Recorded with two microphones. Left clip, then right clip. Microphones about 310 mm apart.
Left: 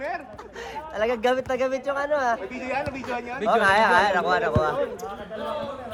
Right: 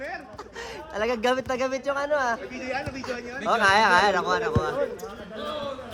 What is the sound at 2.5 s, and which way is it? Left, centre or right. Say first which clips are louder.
Speech: left 3 dB; centre.